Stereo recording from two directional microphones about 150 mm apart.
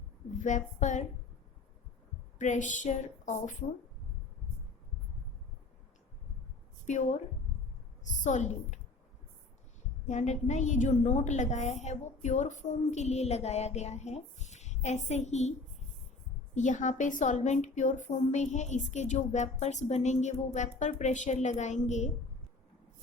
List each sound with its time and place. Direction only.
0.3 s a woman's voice: 55° left (ahead or behind)
2.4 s a woman's voice: 55° left (ahead or behind)
6.8 s a woman's voice: 55° left (ahead or behind)
10.1 s a woman's voice: 55° left (ahead or behind)
16.6 s a woman's voice: 55° left (ahead or behind)